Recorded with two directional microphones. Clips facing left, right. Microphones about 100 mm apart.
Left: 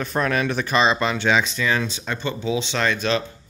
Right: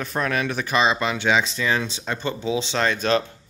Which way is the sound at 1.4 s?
25° right (ahead or behind).